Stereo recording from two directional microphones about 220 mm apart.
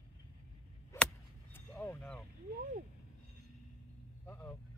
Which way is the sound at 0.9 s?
15° left (ahead or behind).